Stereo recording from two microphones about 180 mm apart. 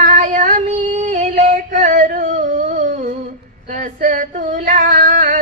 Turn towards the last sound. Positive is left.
turn(degrees=-45)  # may be behind; listen again after turning